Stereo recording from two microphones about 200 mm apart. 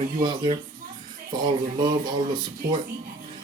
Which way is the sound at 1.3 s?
20° right (ahead or behind).